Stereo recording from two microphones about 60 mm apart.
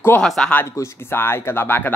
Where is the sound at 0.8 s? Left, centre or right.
Left.